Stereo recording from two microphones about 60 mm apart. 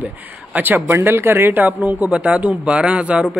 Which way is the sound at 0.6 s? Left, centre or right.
Right.